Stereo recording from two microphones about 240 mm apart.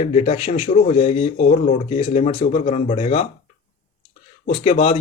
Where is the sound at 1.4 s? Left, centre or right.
Left.